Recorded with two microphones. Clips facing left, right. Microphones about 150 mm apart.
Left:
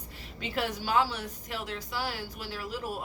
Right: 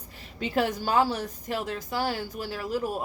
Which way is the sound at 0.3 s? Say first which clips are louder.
Right 6 dB; 45° right (ahead or behind).